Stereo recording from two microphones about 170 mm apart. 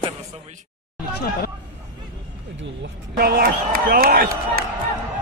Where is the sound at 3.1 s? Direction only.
65° right (ahead or behind).